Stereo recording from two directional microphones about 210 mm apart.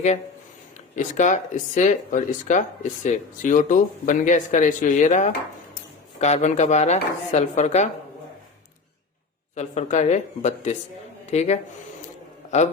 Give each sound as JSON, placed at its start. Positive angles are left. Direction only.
{"t": 0.9, "sound": "speech", "side_deg": 35}
{"t": 9.6, "sound": "a man's voice", "side_deg": 35}